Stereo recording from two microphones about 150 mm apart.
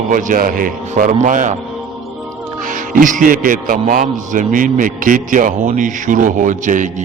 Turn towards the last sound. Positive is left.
turn(degrees=-60)  # may be behind; listen again after turning